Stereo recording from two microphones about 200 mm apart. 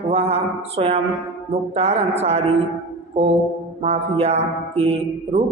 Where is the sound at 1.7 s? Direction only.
30° right (ahead or behind).